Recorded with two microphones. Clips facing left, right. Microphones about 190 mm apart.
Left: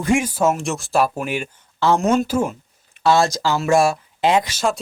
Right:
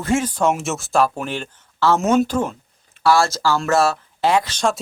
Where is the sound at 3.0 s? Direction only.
20° left (ahead or behind).